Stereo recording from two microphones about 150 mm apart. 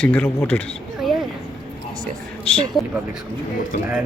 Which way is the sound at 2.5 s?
10° left (ahead or behind).